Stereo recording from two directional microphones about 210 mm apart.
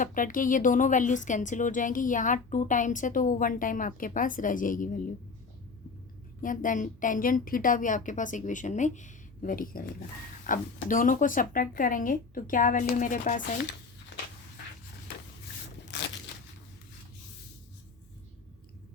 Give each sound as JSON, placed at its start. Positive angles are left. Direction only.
{"t": 0.0, "sound": "speech", "side_deg": 40}
{"t": 6.4, "sound": "speech", "side_deg": 40}